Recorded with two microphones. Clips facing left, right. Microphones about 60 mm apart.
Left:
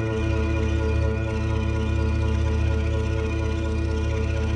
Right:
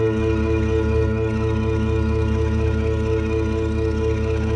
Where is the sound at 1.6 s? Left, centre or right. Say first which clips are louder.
Right 6 dB; right.